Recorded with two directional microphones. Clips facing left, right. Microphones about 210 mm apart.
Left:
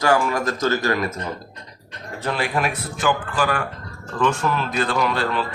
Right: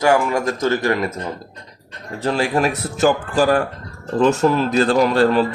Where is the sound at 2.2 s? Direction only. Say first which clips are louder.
Right 5 dB; 40° right (ahead or behind).